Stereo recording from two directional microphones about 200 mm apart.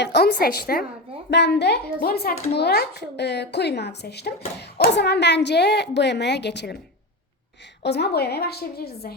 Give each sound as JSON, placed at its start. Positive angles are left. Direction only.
{"t": 0.0, "sound": "a woman's voice", "side_deg": 55}
{"t": 7.8, "sound": "a woman's voice", "side_deg": 55}